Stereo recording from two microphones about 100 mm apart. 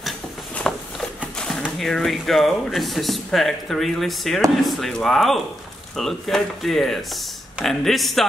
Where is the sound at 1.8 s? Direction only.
5° left (ahead or behind).